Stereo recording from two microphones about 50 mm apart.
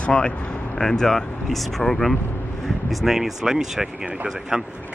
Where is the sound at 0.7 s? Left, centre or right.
Centre.